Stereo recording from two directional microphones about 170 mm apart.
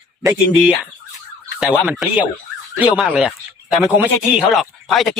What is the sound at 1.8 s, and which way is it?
Speech, 5° right (ahead or behind).